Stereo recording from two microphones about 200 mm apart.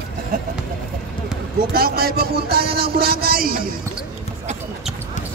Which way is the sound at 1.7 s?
50° right (ahead or behind).